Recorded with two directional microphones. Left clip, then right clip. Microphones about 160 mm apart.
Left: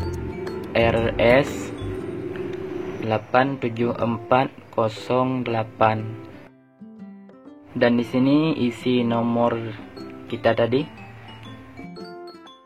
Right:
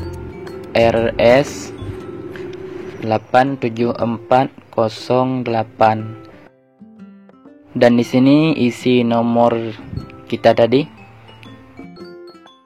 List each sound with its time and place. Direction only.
0.0 s music: centre (ahead or behind)
0.7 s a man's voice: 35° right (ahead or behind)
7.8 s speech: 45° right (ahead or behind)
11.7 s music: centre (ahead or behind)